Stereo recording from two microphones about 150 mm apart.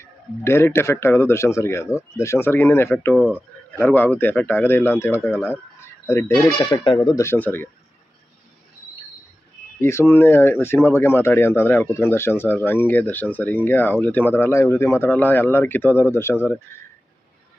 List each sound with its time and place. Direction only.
0.4 s speech: 15° left (ahead or behind)
3.2 s speech: 5° right (ahead or behind)
3.8 s speech: 10° left (ahead or behind)
9.8 s speech: 15° left (ahead or behind)